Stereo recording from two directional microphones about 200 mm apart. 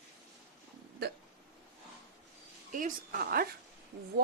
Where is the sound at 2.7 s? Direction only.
45° right (ahead or behind).